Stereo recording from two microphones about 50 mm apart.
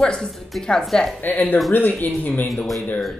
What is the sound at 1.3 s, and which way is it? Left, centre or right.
Speech, left.